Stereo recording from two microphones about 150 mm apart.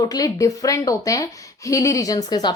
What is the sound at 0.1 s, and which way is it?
A woman's voice, 25° left (ahead or behind).